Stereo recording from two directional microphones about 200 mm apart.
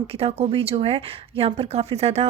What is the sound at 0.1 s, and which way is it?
Speech, 30° right (ahead or behind).